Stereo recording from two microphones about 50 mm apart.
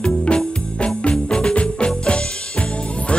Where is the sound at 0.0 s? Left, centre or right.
Centre.